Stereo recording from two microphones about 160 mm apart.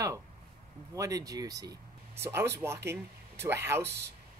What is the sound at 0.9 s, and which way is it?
Speech, 20° right (ahead or behind).